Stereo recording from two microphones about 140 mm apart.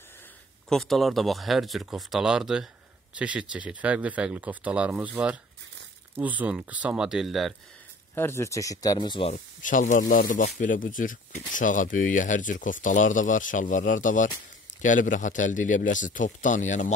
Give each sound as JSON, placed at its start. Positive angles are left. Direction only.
{"t": 0.7, "sound": "speech", "side_deg": 0}
{"t": 8.1, "sound": "speech", "side_deg": 15}
{"t": 9.3, "sound": "speech", "side_deg": 70}